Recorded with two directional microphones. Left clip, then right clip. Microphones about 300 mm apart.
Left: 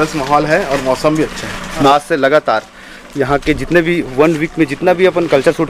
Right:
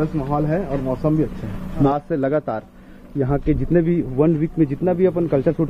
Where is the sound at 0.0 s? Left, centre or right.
Centre.